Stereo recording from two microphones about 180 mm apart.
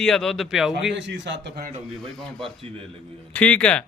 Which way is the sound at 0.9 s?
80° right.